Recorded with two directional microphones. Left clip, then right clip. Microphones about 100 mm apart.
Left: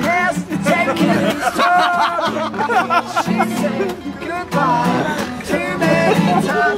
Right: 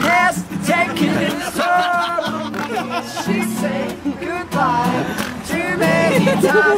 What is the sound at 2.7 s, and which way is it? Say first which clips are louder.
Music: left 11 dB; 40° left (ahead or behind).